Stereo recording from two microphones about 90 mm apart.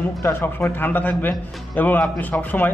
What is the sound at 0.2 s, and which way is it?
A man's voice, 30° left (ahead or behind).